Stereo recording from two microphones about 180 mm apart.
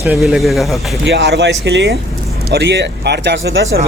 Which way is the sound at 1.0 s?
70° right (ahead or behind).